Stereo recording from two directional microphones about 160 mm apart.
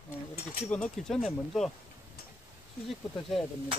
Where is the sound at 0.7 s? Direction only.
5° left (ahead or behind).